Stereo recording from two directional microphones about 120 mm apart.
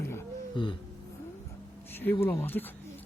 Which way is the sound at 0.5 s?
40° left (ahead or behind).